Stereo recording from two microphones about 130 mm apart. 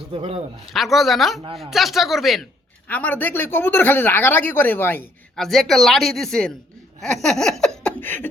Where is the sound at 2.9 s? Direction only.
10° left (ahead or behind).